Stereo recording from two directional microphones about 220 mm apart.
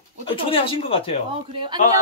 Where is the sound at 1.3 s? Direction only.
20° right (ahead or behind).